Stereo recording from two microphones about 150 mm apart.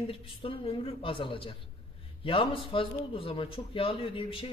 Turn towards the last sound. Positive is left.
turn(degrees=35)  # may be behind; listen again after turning